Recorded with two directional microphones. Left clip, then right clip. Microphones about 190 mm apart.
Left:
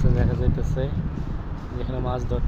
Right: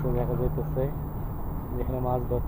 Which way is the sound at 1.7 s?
35° left (ahead or behind).